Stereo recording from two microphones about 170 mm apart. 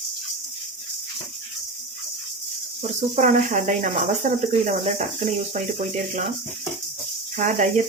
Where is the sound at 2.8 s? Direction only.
45° right (ahead or behind).